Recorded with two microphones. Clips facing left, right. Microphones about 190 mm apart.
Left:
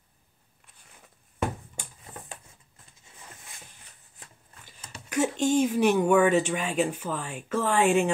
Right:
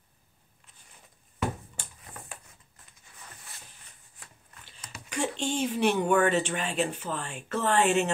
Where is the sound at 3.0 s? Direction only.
20° left (ahead or behind).